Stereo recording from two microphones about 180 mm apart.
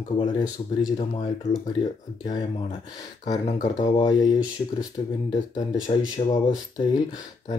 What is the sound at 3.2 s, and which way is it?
Speech, 40° left (ahead or behind).